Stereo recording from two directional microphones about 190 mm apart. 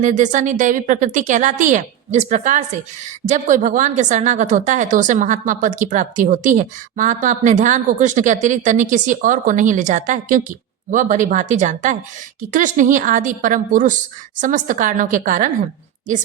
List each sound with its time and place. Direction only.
0.0 s a woman's voice: 40° right (ahead or behind)